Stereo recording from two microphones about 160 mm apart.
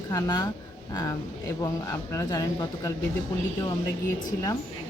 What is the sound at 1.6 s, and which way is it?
Speech, 20° left (ahead or behind).